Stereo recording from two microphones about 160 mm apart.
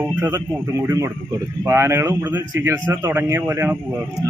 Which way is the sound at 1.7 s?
15° right (ahead or behind).